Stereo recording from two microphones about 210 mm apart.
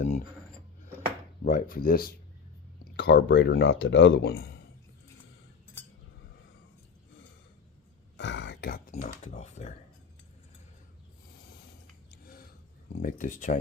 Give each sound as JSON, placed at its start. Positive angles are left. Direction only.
{"t": 1.5, "sound": "speech", "side_deg": 40}
{"t": 8.1, "sound": "a sound", "side_deg": 60}
{"t": 8.9, "sound": "speech", "side_deg": 35}
{"t": 13.0, "sound": "speech", "side_deg": 40}